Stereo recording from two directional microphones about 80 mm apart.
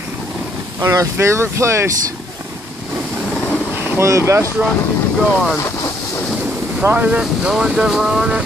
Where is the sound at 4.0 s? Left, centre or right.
Right.